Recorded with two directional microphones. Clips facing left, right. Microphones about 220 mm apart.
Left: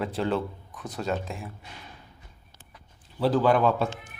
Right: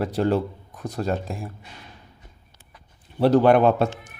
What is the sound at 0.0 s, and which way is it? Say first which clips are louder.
Speech: right 5 dB; 40° right (ahead or behind).